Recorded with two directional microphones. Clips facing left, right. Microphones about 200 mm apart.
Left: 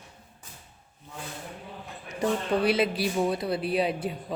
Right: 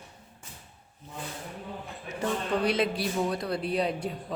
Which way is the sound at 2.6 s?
5° left (ahead or behind).